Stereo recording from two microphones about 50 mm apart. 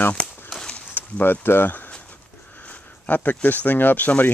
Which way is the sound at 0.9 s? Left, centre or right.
Left.